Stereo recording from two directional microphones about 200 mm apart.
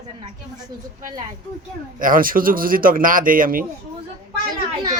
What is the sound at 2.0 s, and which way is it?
Speech, 45° right (ahead or behind).